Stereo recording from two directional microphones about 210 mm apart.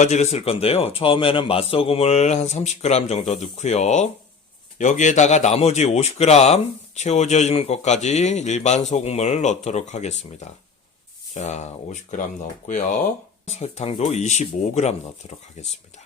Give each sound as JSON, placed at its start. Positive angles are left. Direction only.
{"t": 0.0, "sound": "speech", "side_deg": 30}